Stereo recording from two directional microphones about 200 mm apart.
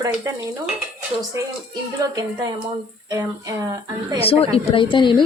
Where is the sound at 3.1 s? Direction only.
15° right (ahead or behind).